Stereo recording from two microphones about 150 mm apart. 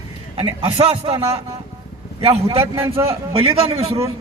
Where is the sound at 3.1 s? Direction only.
40° right (ahead or behind).